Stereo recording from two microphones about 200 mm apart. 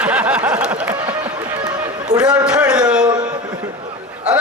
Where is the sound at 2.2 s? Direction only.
5° right (ahead or behind).